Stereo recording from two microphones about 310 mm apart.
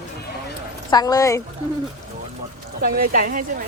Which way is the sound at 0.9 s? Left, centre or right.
Centre.